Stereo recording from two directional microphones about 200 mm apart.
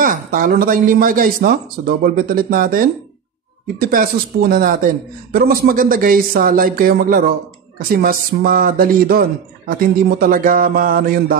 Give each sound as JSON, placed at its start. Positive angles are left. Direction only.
{"t": 0.0, "sound": "a man's voice", "side_deg": -45}